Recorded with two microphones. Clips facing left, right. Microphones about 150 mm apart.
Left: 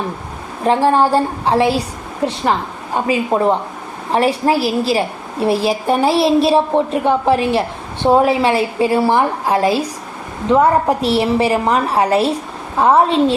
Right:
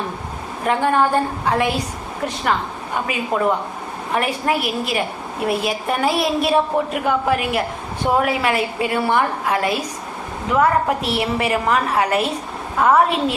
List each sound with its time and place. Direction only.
0.6 s a woman's voice: 30° left (ahead or behind)